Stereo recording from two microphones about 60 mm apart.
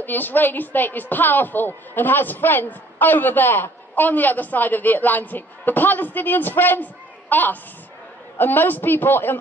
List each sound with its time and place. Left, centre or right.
0.0 s a woman's voice: left